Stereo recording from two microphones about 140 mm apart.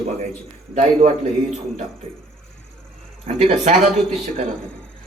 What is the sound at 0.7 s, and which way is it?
Speech, 60° right (ahead or behind).